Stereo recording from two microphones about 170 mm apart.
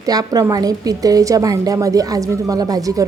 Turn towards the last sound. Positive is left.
turn(degrees=-20)  # may be behind; listen again after turning